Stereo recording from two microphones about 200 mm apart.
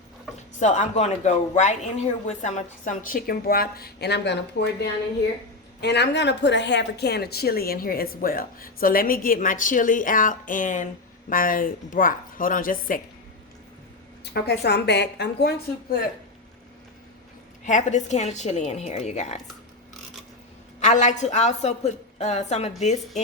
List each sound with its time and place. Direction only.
0.6 s a woman's voice: 35° left (ahead or behind)
14.3 s a woman's voice: 55° left (ahead or behind)
17.7 s a woman's voice: 35° left (ahead or behind)
20.8 s a woman's voice: 35° left (ahead or behind)